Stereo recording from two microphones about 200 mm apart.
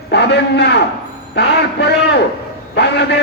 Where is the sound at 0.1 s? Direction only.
55° left (ahead or behind).